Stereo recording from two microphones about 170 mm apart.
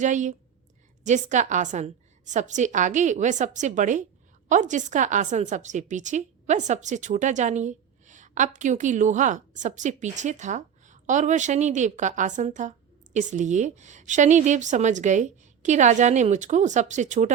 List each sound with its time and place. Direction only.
0.0 s a woman's voice: 45° right (ahead or behind)